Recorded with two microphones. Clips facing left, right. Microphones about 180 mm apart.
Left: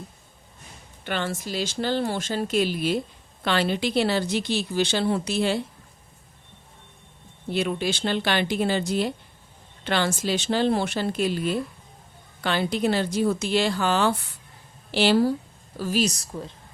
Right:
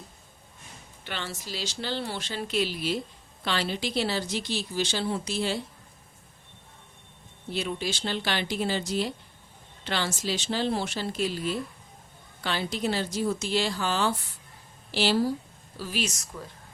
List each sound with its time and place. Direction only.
1.0 s speech: 50° left (ahead or behind)
7.5 s speech: 60° left (ahead or behind)
15.8 s a woman's voice: 40° left (ahead or behind)